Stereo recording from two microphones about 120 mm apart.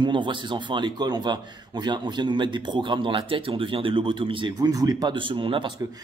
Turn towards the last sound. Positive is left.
turn(degrees=-45)  # may be behind; listen again after turning